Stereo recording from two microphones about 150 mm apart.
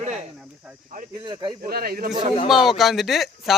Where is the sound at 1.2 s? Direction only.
30° right (ahead or behind).